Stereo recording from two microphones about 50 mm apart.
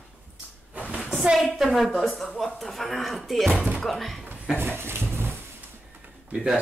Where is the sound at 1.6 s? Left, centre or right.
Centre.